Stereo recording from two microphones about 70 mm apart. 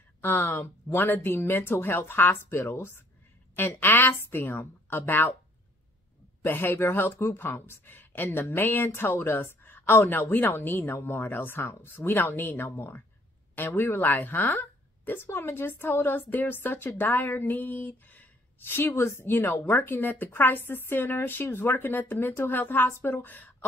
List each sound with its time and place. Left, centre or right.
0.2 s a woman's voice: left
2.6 s speech: left
3.5 s a woman's voice: left
6.4 s a woman's voice: left